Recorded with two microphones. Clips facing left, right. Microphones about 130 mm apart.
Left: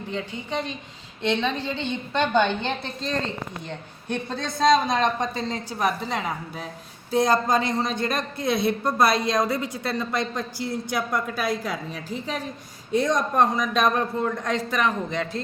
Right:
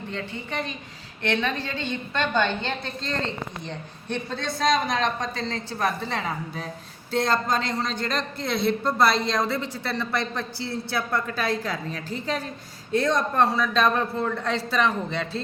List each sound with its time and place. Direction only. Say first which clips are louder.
0.1 s a man's voice: left 4 dB; 10° left (ahead or behind)
4.5 s a woman's voice: left 4 dB; 20° left (ahead or behind)
5.8 s a woman's voice: left 1 dB; 5° left (ahead or behind)